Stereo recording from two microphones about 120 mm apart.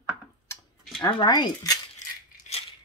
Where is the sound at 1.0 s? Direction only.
40° left (ahead or behind).